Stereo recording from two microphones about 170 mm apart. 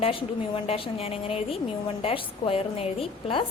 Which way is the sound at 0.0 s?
30° left (ahead or behind).